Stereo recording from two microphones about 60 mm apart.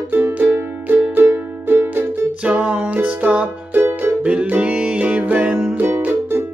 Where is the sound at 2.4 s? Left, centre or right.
Centre.